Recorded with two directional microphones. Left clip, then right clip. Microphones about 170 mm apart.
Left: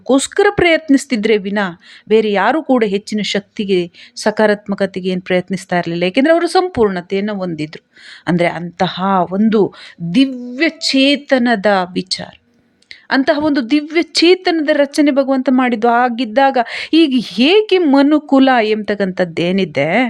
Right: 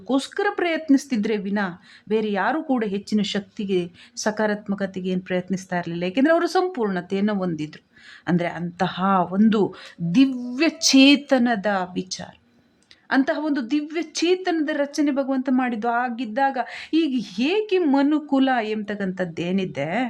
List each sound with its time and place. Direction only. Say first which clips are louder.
0.1 s a woman's voice: left 11 dB; 30° left (ahead or behind)
6.2 s speech: left 6 dB; 15° left (ahead or behind)
6.7 s a woman's voice: left 11 dB; 35° left (ahead or behind)
6.9 s a woman's voice: left 6 dB; 15° left (ahead or behind)
10.1 s a sound: left 5 dB; 10° left (ahead or behind)
11.4 s a woman's voice: left 9 dB; 25° left (ahead or behind)